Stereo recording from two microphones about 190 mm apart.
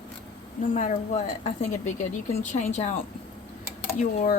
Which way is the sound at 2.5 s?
35° left (ahead or behind).